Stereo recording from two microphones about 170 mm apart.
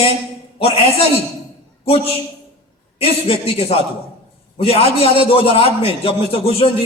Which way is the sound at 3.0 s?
35° left (ahead or behind).